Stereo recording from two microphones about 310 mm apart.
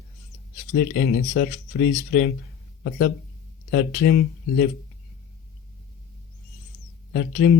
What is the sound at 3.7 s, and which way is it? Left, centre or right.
Speech, left.